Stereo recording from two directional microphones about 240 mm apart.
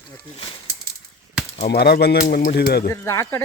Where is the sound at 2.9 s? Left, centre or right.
Centre.